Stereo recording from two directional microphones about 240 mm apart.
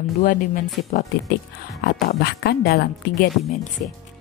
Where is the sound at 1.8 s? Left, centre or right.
Left.